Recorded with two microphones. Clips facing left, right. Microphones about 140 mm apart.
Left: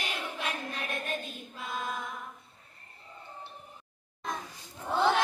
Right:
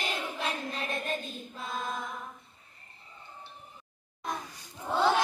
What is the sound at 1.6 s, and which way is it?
Choir, 35° right (ahead or behind).